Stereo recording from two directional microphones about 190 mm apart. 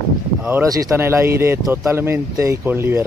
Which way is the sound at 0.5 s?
15° right (ahead or behind).